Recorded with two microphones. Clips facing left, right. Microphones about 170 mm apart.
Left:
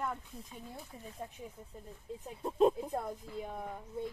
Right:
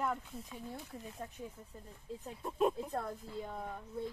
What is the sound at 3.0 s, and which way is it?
Speech, 15° left (ahead or behind).